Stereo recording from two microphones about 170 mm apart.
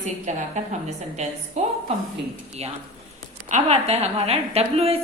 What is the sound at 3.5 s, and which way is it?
A woman's voice, 40° right (ahead or behind).